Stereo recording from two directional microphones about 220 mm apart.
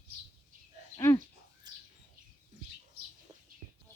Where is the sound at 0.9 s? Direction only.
15° left (ahead or behind).